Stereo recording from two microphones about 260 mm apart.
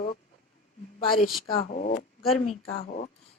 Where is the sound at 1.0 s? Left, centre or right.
Centre.